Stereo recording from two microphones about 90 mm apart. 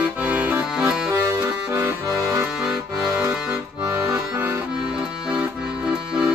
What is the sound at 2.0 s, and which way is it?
Accordion, 35° right (ahead or behind).